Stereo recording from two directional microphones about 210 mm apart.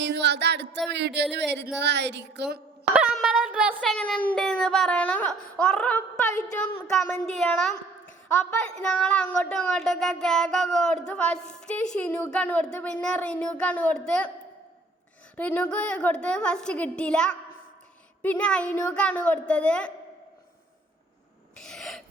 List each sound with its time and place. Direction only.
0.0 s speech: 55° right (ahead or behind)
0.9 s a sound: 55° right (ahead or behind)
2.9 s speech: 5° right (ahead or behind)
3.8 s speech: 5° left (ahead or behind)
7.4 s speech: 5° left (ahead or behind)
15.4 s speech: 5° left (ahead or behind)
21.6 s owl: centre (ahead or behind)